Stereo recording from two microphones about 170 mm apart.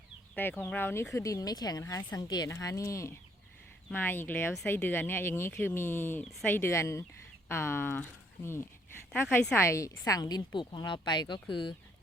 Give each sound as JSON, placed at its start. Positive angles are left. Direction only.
{"t": 0.3, "sound": "a woman's voice", "side_deg": 10}